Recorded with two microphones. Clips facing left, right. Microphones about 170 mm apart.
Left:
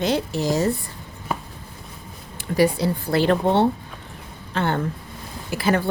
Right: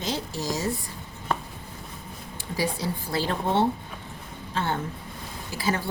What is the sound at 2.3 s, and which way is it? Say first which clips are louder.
A woman's voice: left 10 dB; 65° left (ahead or behind).